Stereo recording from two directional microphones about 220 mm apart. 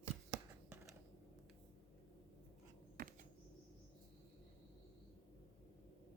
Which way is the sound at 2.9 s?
40° right (ahead or behind).